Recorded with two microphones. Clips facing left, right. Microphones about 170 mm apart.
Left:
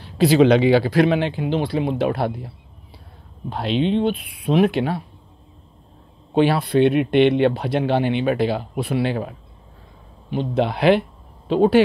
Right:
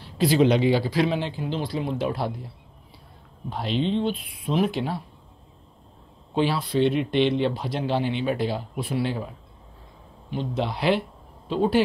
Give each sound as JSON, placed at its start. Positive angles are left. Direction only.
{"t": 0.0, "sound": "speech", "side_deg": 75}
{"t": 3.4, "sound": "speech", "side_deg": 70}
{"t": 6.3, "sound": "speech", "side_deg": 60}
{"t": 10.3, "sound": "speech", "side_deg": 60}